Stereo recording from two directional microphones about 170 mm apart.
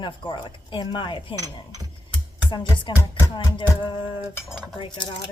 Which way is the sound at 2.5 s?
25° left (ahead or behind).